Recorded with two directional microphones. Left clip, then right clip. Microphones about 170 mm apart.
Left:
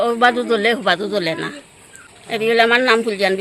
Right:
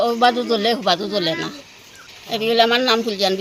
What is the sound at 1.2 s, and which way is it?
Speech, centre (ahead or behind).